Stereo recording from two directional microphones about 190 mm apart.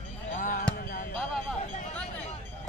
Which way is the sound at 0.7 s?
50° left (ahead or behind).